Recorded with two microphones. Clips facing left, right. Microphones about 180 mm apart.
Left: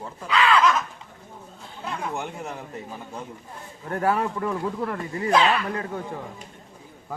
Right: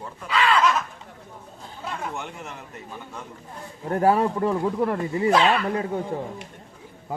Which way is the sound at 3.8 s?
30° right (ahead or behind).